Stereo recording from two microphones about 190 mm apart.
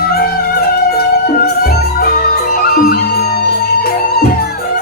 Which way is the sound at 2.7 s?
45° left (ahead or behind).